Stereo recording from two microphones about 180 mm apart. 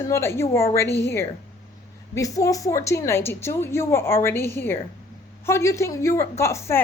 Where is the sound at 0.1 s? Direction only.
15° left (ahead or behind).